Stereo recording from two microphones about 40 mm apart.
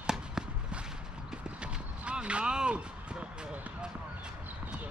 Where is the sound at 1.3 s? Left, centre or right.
Right.